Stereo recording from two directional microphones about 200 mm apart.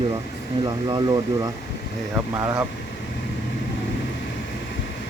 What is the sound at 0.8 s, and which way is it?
Speech, 20° right (ahead or behind).